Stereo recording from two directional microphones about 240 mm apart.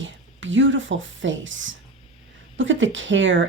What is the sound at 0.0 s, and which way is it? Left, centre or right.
Speech, right.